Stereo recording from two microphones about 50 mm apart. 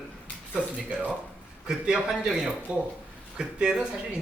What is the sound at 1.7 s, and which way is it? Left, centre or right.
Speech, centre.